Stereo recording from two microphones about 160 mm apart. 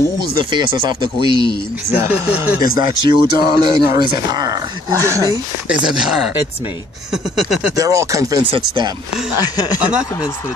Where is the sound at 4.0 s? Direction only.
25° right (ahead or behind).